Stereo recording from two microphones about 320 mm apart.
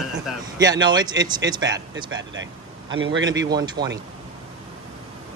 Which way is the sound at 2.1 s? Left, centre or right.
Right.